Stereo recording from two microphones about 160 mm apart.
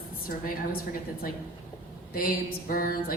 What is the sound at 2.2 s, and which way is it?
Speech, 65° left (ahead or behind).